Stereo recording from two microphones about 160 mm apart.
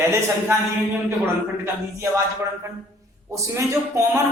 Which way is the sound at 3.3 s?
20° right (ahead or behind).